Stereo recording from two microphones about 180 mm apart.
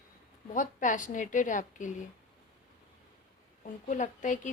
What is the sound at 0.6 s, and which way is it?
A woman's voice, 45° left (ahead or behind).